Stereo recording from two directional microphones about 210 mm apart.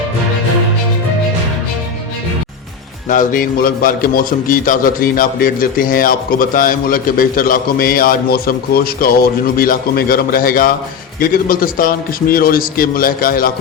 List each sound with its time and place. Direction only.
3.1 s a man's voice: 40° left (ahead or behind)